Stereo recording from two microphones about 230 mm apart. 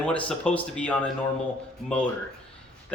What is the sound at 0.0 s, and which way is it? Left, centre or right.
Speech, centre.